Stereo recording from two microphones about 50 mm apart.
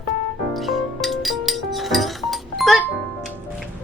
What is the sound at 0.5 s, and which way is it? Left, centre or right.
Music, centre.